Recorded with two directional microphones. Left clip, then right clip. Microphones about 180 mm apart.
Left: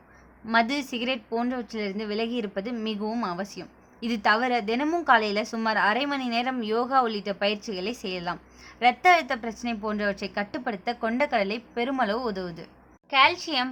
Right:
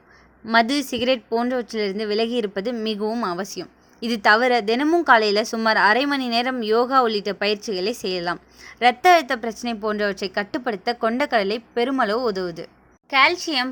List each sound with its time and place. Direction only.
0.4 s a woman's voice: 30° right (ahead or behind)